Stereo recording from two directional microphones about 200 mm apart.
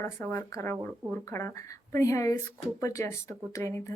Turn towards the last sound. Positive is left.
turn(degrees=15)  # may be behind; listen again after turning